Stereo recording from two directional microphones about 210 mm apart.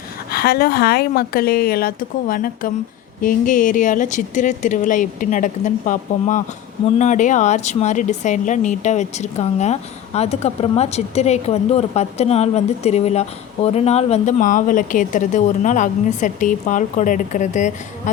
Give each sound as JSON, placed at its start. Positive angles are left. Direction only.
{"t": 0.3, "sound": "a woman's voice", "side_deg": 50}